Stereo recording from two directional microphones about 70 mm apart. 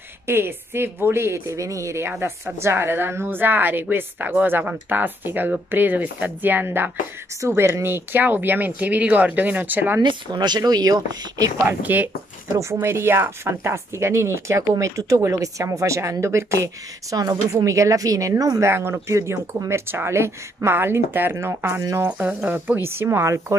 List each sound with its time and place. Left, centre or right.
0.3 s speech: right
10.3 s speech: right
11.6 s speech: right
12.4 s speech: right
18.7 s speech: right
22.0 s speech: right
22.8 s speech: right